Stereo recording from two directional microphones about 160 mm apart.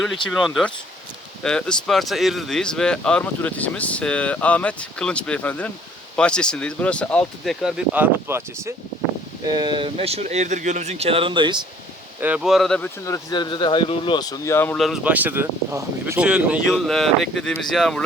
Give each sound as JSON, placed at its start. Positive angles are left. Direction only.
{"t": 0.3, "sound": "speech", "side_deg": 0}
{"t": 7.9, "sound": "speech", "side_deg": -15}
{"t": 9.5, "sound": "speech", "side_deg": -25}
{"t": 12.2, "sound": "speech", "side_deg": -5}
{"t": 13.1, "sound": "speech", "side_deg": 25}
{"t": 14.8, "sound": "speech", "side_deg": 0}
{"t": 16.2, "sound": "speech", "side_deg": -5}